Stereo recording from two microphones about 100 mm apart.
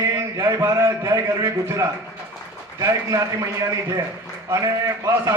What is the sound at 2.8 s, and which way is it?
Speech, 35° right (ahead or behind).